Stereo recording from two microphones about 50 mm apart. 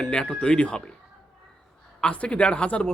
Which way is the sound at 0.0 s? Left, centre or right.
Centre.